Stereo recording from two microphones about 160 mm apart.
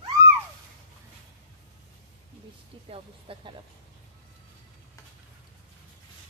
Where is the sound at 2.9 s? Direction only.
35° right (ahead or behind).